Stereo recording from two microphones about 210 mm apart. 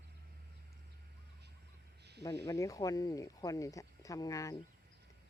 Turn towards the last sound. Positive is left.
turn(degrees=15)  # may be behind; listen again after turning